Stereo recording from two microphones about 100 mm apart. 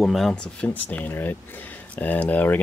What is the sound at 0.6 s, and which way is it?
Speech, 15° left (ahead or behind).